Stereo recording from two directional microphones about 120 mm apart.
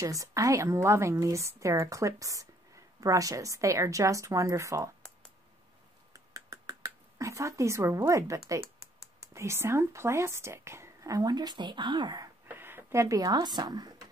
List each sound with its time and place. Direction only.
0.0 s a woman's voice: 30° right (ahead or behind)
6.1 s a sound: 30° right (ahead or behind)
9.3 s a woman's voice: 25° right (ahead or behind)
12.4 s speech: 15° right (ahead or behind); by 14.0 s 35° right (ahead or behind)